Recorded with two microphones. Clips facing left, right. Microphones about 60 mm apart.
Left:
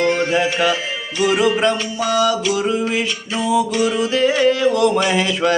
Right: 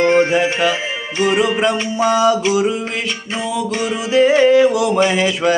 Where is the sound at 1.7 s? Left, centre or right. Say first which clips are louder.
Right 3 dB; right.